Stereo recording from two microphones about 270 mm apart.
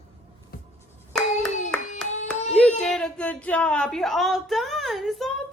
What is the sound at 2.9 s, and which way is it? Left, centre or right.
Speech, centre.